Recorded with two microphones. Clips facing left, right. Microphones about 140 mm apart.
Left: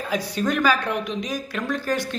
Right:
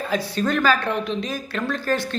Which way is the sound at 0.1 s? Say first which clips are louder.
Right 1 dB; 15° left (ahead or behind).